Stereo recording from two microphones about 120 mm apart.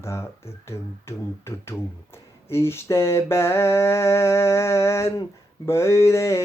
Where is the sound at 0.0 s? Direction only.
20° left (ahead or behind).